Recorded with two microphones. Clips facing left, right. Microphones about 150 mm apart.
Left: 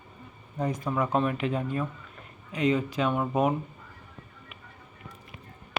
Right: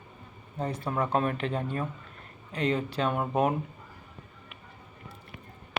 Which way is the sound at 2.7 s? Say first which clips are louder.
Left 2 dB; 35° right (ahead or behind).